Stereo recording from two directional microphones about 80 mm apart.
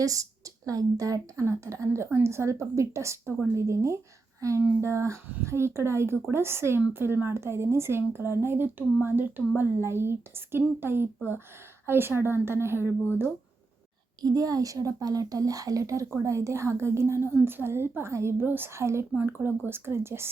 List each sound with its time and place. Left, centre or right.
0.0 s a woman's voice: right
14.2 s a woman's voice: right